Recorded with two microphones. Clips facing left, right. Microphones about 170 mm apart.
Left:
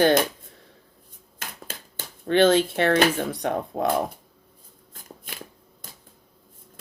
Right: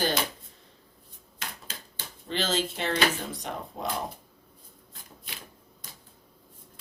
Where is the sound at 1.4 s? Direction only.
50° left (ahead or behind).